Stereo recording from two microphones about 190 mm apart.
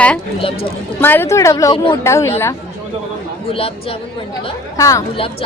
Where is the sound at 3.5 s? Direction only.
30° left (ahead or behind).